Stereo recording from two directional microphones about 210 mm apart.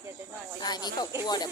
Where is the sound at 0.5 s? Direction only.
20° left (ahead or behind).